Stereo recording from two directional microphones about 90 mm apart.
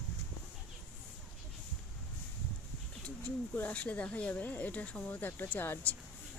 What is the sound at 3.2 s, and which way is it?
Speech, 15° left (ahead or behind).